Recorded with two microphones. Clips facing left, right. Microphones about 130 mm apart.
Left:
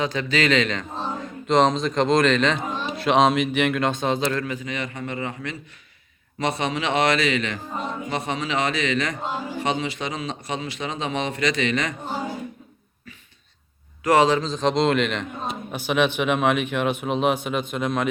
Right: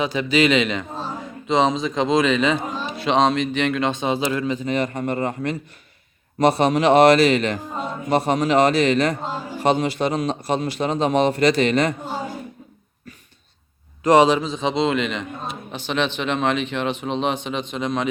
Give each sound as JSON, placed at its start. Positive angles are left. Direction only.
{"t": 0.0, "sound": "a man's voice", "side_deg": -15}
{"t": 1.5, "sound": "speech", "side_deg": -5}
{"t": 4.2, "sound": "a man's voice", "side_deg": -15}
{"t": 4.6, "sound": "a man's voice", "side_deg": -40}
{"t": 14.0, "sound": "a man's voice", "side_deg": -15}
{"t": 14.5, "sound": "speech", "side_deg": -5}